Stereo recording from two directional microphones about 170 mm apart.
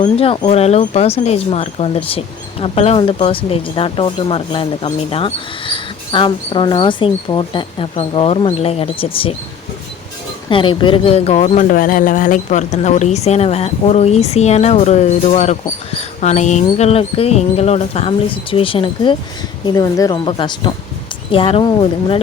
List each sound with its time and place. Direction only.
0.0 s speech: 30° left (ahead or behind)
10.5 s speech: 30° left (ahead or behind)